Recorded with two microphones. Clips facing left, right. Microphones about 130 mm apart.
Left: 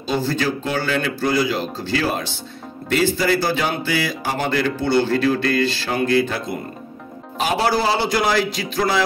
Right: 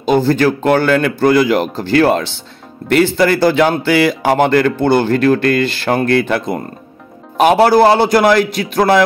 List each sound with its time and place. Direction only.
0.0 s speech: 55° right (ahead or behind)